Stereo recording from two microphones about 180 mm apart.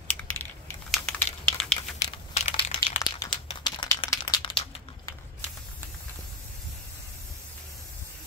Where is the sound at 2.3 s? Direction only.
35° left (ahead or behind).